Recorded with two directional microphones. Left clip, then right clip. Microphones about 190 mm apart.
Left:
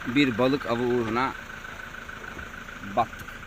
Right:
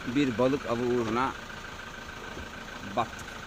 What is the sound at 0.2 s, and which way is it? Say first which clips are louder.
Speech: left 3 dB; 20° left (ahead or behind).